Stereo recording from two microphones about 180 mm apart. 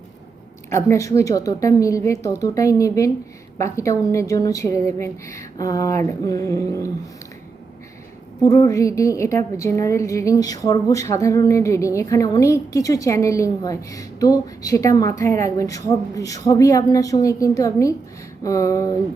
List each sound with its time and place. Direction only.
0.7 s a woman's voice: 15° left (ahead or behind)
8.4 s a woman's voice: 20° left (ahead or behind)
18.4 s a sound: 20° left (ahead or behind)